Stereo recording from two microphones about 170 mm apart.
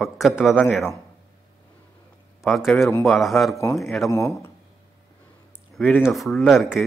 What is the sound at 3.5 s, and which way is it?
Speech, 20° left (ahead or behind).